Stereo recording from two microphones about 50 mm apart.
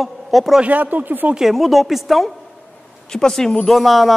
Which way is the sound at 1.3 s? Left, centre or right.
Centre.